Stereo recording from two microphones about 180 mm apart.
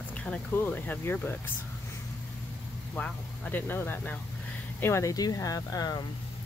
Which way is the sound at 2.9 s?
10° left (ahead or behind).